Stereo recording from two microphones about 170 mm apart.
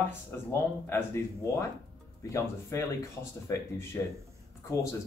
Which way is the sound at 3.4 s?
15° left (ahead or behind).